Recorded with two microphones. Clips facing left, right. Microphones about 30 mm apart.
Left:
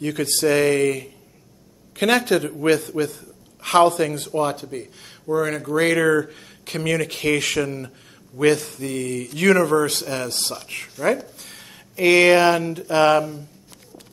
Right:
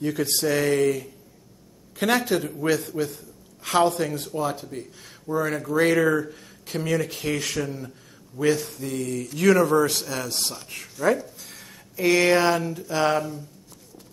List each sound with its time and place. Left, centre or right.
0.0 s speech: left
0.5 s a man's voice: left
4.3 s speech: left
6.3 s speech: left
8.7 s speech: left